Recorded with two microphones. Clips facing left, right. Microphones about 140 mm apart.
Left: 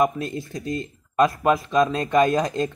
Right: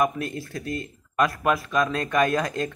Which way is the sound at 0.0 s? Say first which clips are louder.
Left 3 dB; 25° left (ahead or behind).